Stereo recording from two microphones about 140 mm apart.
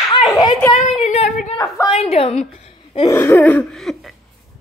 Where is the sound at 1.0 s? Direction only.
55° left (ahead or behind).